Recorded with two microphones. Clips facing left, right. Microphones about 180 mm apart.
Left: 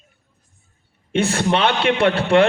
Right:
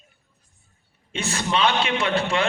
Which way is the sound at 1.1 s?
60° left (ahead or behind).